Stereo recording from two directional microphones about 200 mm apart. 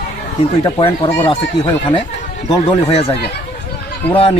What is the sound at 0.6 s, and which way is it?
Speech, 25° left (ahead or behind).